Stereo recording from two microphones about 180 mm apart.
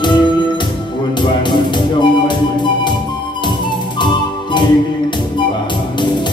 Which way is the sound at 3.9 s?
25° left (ahead or behind).